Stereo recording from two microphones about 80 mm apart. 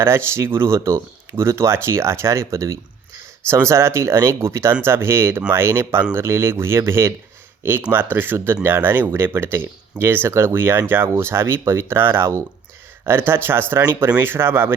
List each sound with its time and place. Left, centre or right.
0.0 s speech: right